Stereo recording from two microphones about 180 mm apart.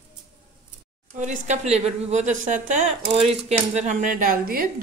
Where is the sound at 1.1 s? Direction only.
45° right (ahead or behind).